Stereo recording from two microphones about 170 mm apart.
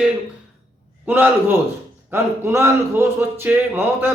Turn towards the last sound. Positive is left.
turn(degrees=-10)  # may be behind; listen again after turning